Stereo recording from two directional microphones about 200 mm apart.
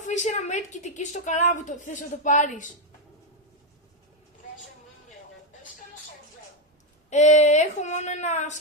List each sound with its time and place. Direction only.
0.0 s a woman's voice: 35° left (ahead or behind)
7.1 s a woman's voice: 35° left (ahead or behind)